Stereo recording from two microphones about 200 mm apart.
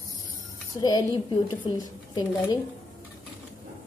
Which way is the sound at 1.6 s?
25° left (ahead or behind).